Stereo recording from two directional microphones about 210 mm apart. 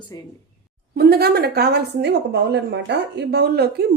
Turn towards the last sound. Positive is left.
turn(degrees=-50)  # may be behind; listen again after turning